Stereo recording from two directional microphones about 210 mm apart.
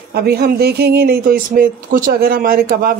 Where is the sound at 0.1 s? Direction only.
50° right (ahead or behind).